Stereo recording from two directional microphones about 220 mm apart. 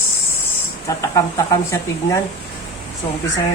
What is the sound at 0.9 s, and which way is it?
Speech, 15° left (ahead or behind).